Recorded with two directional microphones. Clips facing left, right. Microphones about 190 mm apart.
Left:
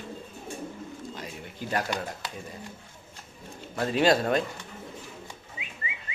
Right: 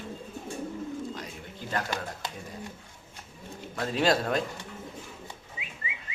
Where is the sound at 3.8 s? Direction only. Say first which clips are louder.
Left 3 dB; centre (ahead or behind).